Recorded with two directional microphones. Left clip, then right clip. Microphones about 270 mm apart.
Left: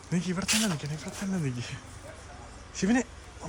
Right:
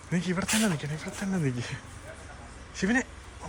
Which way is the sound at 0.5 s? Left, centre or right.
Centre.